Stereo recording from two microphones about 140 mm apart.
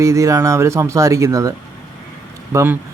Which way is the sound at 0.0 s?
25° right (ahead or behind).